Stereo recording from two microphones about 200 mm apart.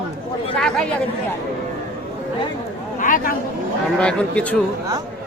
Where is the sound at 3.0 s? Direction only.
40° left (ahead or behind).